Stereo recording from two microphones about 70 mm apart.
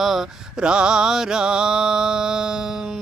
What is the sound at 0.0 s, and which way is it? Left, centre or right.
Mantra, centre.